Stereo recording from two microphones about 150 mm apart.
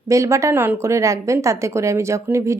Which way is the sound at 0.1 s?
20° right (ahead or behind).